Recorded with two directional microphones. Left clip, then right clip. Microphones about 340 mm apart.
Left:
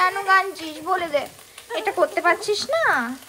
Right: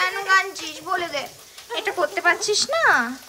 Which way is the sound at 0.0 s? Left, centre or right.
Centre.